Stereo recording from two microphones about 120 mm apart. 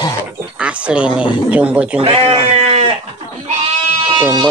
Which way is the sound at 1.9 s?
50° right (ahead or behind).